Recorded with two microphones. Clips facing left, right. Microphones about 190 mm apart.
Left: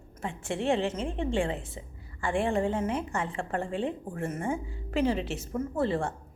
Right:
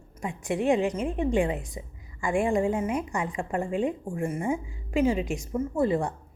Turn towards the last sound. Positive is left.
turn(degrees=-15)  # may be behind; listen again after turning